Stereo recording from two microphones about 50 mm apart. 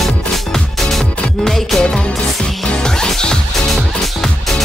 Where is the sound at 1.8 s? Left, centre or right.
Centre.